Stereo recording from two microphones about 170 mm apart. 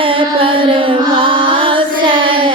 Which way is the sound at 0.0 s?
30° right (ahead or behind).